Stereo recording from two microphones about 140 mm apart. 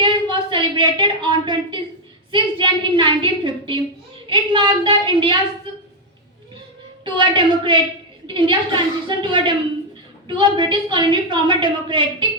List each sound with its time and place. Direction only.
0.0 s a sound: 35° right (ahead or behind)
2.3 s a woman's voice: 35° right (ahead or behind)
7.0 s a woman's voice: 35° right (ahead or behind)